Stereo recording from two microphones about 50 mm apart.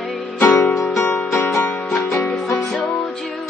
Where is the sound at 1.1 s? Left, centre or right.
Left.